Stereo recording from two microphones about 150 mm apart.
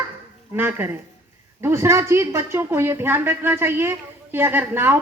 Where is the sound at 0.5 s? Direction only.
15° right (ahead or behind).